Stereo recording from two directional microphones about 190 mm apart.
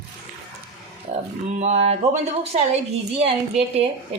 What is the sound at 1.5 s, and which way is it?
Speech, 35° right (ahead or behind).